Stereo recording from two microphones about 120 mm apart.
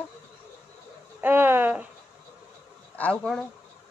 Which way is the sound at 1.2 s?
15° right (ahead or behind).